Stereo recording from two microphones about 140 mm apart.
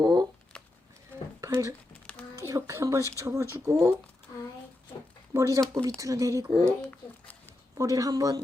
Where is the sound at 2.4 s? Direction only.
20° right (ahead or behind).